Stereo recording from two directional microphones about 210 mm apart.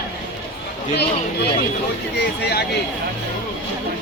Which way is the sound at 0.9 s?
50° left (ahead or behind).